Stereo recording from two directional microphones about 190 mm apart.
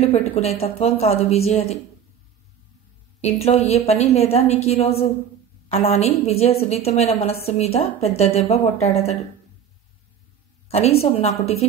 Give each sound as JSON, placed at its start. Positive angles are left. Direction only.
{"t": 0.0, "sound": "a woman's voice", "side_deg": 35}
{"t": 3.2, "sound": "a woman's voice", "side_deg": 35}
{"t": 10.7, "sound": "a woman's voice", "side_deg": 30}